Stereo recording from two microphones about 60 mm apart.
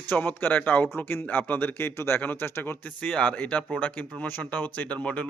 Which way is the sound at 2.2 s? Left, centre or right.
Left.